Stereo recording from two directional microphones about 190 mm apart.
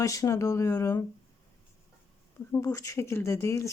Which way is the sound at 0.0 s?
15° left (ahead or behind).